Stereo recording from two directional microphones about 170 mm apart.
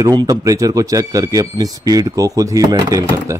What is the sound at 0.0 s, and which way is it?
Speech, 20° right (ahead or behind).